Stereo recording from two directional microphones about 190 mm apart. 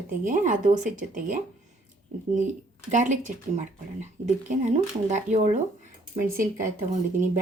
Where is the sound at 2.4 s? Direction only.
40° right (ahead or behind).